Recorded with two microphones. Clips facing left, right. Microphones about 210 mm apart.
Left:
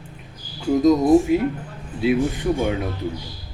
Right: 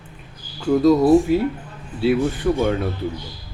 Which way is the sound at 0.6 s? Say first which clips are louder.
Right 2 dB; 20° left (ahead or behind).